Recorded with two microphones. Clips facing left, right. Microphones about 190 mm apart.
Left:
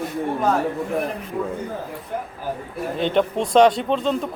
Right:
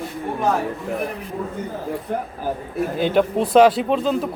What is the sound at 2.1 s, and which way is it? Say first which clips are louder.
Speech: right 3 dB; 50° right (ahead or behind).